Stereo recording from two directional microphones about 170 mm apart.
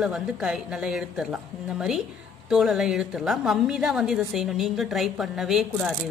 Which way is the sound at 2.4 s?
Centre (ahead or behind).